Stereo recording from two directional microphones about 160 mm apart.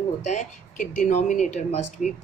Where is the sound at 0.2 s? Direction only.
45° left (ahead or behind).